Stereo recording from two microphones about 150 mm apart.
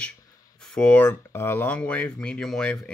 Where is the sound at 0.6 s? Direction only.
5° left (ahead or behind).